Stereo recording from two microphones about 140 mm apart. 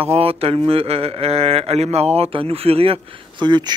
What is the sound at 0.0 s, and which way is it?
A man's voice, 45° right (ahead or behind).